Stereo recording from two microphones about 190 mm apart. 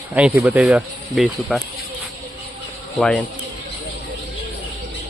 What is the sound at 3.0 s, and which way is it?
Speech, 5° left (ahead or behind).